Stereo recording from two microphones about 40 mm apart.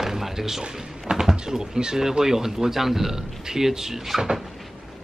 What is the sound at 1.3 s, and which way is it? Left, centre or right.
Speech, centre.